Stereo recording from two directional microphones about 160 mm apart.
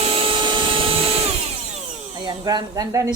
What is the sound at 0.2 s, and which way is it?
Vacuum cleaner, 30° right (ahead or behind).